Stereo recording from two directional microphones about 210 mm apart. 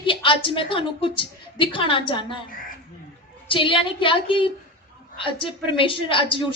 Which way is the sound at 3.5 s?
25° left (ahead or behind).